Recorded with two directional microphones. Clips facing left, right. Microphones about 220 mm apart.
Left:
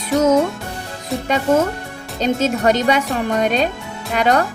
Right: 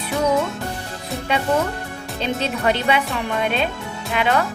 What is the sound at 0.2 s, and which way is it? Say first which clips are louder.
Speech: left 5 dB; 45° left (ahead or behind).